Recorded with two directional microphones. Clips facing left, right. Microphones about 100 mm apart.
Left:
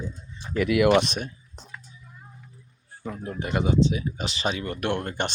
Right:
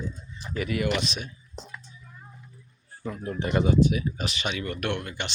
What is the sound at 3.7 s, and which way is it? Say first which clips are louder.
Speech: even; 25° left (ahead or behind).